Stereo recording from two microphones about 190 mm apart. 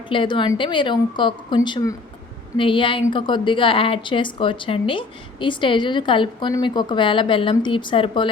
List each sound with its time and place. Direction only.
0.1 s a woman's voice: 25° left (ahead or behind)